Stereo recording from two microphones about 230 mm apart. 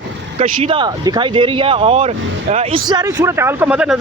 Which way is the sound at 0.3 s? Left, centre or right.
Right.